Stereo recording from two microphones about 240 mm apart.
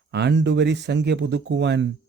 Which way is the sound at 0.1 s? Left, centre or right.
Right.